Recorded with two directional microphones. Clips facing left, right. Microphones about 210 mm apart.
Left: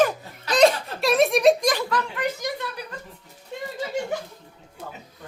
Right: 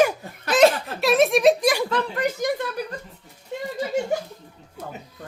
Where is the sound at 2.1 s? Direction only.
50° right (ahead or behind).